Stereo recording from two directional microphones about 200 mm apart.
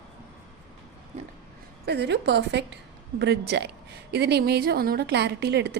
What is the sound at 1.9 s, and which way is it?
A woman's voice, 55° right (ahead or behind).